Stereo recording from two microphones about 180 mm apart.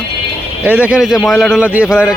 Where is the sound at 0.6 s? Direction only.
10° right (ahead or behind).